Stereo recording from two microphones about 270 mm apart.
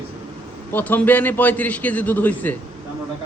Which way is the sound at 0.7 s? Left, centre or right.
Centre.